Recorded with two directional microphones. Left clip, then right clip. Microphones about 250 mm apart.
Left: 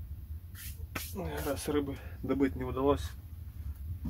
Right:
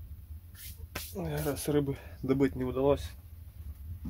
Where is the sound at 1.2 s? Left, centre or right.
Right.